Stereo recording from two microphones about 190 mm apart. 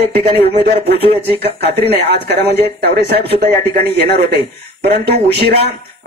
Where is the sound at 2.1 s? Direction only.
60° right (ahead or behind).